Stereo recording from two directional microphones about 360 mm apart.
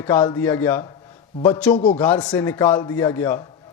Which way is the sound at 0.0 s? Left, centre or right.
Centre.